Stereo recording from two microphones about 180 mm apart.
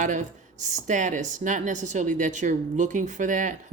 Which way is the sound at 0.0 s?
45° right (ahead or behind).